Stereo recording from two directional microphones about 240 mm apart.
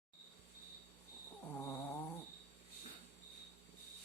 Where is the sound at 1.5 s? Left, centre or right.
Centre.